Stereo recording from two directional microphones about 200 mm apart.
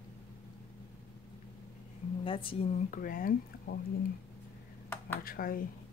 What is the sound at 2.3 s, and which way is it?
Speech, 25° left (ahead or behind).